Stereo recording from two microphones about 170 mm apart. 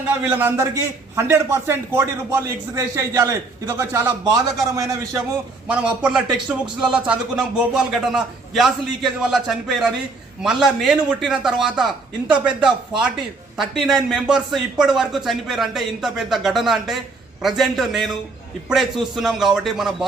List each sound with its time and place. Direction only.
0.2 s a man's voice: 10° right (ahead or behind)
5.6 s a man's voice: 5° right (ahead or behind)